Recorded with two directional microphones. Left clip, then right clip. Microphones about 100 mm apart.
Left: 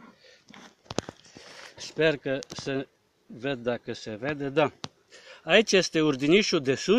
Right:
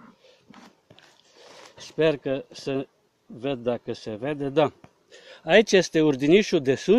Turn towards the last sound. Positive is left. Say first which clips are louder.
# right 3 dB
turn(degrees=-25)  # may be behind; listen again after turning